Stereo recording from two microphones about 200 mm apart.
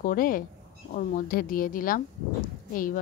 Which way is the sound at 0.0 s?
45° left (ahead or behind).